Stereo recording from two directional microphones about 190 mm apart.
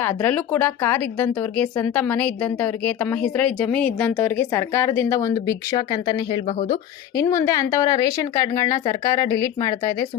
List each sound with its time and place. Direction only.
0.0 s speech: 10° left (ahead or behind)
6.5 s speech: 40° left (ahead or behind)
7.2 s speech: 15° left (ahead or behind)